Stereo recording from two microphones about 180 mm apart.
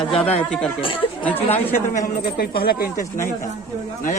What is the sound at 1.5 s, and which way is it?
A man's voice, 45° left (ahead or behind).